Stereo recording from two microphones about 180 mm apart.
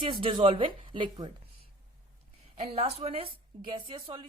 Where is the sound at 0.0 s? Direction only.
30° right (ahead or behind).